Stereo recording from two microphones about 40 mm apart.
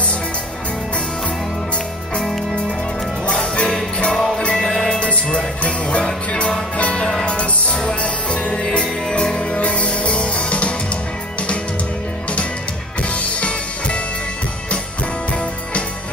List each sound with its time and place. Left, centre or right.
2.1 s music: centre
4.4 s music: left
9.6 s music: left
13.1 s music: left